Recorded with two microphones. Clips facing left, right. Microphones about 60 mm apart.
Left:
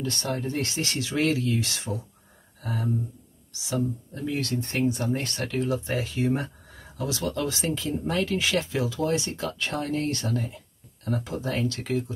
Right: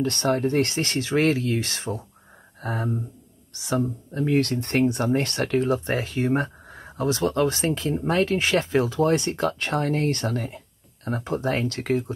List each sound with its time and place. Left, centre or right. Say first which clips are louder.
0.0 s speech: right 7 dB; right
11.1 s speech: right 4 dB; right